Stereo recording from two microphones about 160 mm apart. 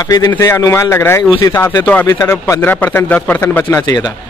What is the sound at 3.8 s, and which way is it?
Speech, 25° left (ahead or behind).